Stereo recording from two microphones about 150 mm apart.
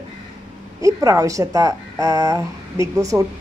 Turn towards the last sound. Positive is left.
turn(degrees=-20)  # may be behind; listen again after turning